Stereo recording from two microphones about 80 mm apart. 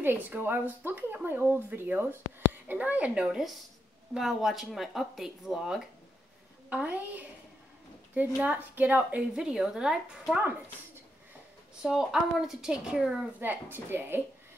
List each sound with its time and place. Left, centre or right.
0.0 s speech: right; by 5.8 s centre
6.7 s speech: centre
9.3 s speech: centre
11.8 s speech: centre
13.4 s speech: right